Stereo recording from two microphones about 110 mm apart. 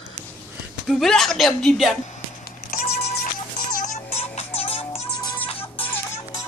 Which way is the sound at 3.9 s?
70° left (ahead or behind).